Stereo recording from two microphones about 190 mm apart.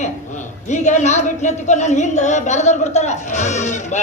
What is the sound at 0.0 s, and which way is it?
A man's voice, 40° left (ahead or behind).